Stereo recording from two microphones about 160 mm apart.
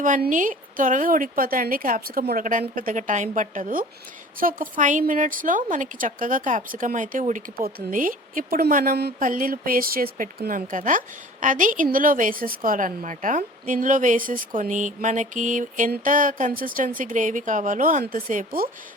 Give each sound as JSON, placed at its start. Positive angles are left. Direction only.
{"t": 0.0, "sound": "speech", "side_deg": -55}
{"t": 9.1, "sound": "speech", "side_deg": -60}